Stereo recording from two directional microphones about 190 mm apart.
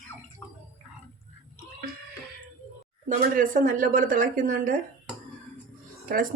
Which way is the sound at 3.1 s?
45° right (ahead or behind).